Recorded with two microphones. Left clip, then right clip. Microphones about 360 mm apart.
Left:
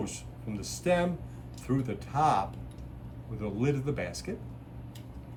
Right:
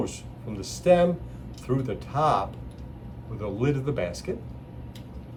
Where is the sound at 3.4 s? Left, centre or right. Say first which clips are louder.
Right 4 dB; centre.